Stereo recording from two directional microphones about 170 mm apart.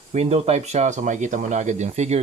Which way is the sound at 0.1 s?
40° right (ahead or behind).